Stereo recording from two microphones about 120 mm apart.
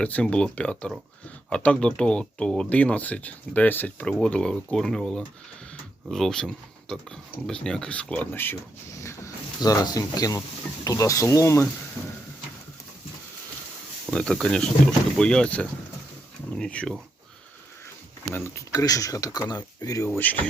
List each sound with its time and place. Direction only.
0.0 s speech: 10° left (ahead or behind)
12.0 s a sound: 10° left (ahead or behind)
14.1 s speech: centre (ahead or behind)
18.3 s speech: 20° left (ahead or behind)
20.1 s speech: 15° left (ahead or behind)